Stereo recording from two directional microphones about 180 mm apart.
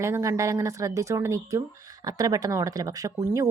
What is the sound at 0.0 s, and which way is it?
Speech, 15° right (ahead or behind).